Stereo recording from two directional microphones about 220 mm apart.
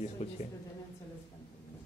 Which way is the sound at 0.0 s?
30° left (ahead or behind).